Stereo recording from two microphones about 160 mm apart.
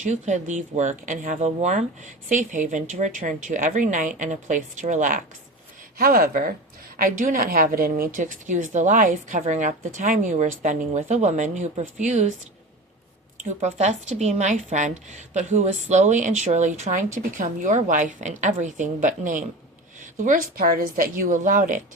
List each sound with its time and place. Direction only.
0.0 s speech: 50° right (ahead or behind)
6.0 s speech: 65° right (ahead or behind); by 12.3 s 45° right (ahead or behind)
13.3 s speech: 45° right (ahead or behind)